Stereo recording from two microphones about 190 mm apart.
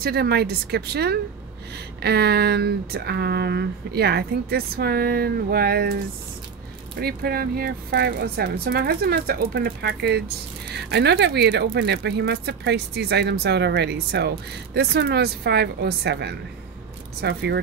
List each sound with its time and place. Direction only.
0.0 s a woman's voice: 55° right (ahead or behind)
7.0 s a woman's voice: 55° right (ahead or behind)